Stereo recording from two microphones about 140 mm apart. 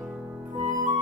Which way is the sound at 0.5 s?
60° right (ahead or behind).